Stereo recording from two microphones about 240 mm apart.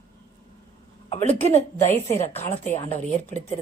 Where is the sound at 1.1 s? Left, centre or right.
Left.